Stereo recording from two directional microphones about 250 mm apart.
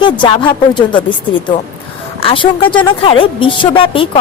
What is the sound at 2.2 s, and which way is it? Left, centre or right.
A woman's voice, left.